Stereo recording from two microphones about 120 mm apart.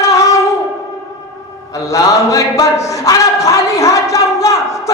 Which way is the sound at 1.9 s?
25° left (ahead or behind).